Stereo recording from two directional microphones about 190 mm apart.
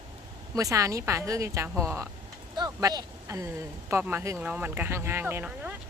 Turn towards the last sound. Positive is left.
turn(degrees=-5)  # may be behind; listen again after turning